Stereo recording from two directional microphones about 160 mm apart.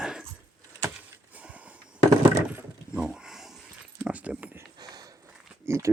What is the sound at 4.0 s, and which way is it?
Keys jangling, 10° right (ahead or behind).